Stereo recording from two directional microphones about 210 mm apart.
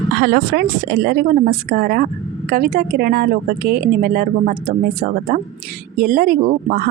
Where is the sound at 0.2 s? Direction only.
50° right (ahead or behind).